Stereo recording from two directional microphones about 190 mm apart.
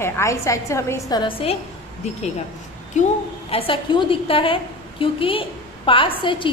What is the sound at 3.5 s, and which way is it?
A woman's voice, 30° left (ahead or behind).